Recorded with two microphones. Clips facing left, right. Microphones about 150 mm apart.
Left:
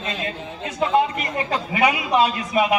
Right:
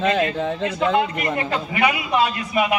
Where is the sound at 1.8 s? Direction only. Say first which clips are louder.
Left 1 dB; 30° left (ahead or behind).